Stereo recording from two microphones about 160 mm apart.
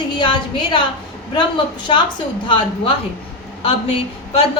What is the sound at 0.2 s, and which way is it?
A woman's voice, 30° left (ahead or behind).